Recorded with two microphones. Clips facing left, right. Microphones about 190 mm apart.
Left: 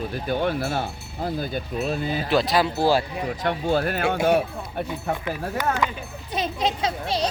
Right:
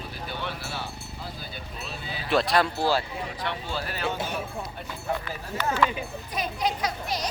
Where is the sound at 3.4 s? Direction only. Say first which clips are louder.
Left 11 dB; 50° left (ahead or behind).